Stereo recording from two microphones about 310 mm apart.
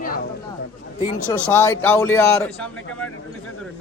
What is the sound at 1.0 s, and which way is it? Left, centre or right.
Speech, centre.